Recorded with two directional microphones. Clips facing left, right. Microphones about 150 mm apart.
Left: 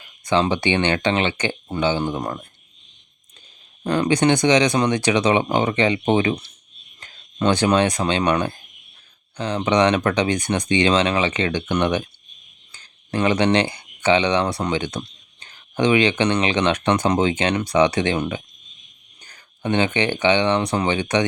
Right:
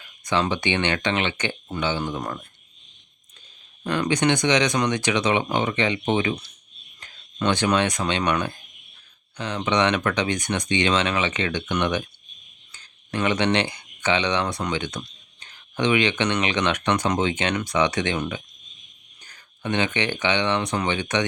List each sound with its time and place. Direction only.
0.0 s speech: 30° left (ahead or behind)
3.8 s speech: 35° left (ahead or behind)